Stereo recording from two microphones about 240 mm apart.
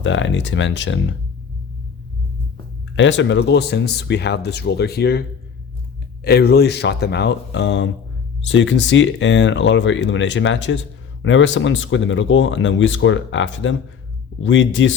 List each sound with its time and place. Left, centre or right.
0.0 s speech: left
2.9 s speech: left
6.2 s speech: left